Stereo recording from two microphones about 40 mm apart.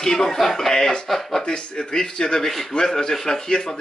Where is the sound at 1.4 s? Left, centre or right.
Left.